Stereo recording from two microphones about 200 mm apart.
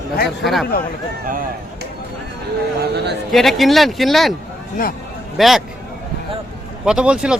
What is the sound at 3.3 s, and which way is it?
Speech, centre (ahead or behind).